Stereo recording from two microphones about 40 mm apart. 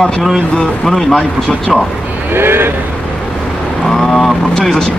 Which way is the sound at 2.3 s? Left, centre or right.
Right.